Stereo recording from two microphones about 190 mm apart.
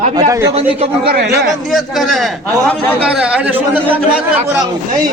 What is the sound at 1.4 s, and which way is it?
A man's voice, centre (ahead or behind).